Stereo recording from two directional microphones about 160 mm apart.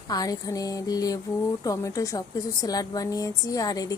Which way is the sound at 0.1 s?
25° left (ahead or behind).